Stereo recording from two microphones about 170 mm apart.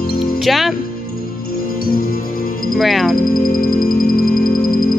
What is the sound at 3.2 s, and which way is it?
Music, 55° left (ahead or behind).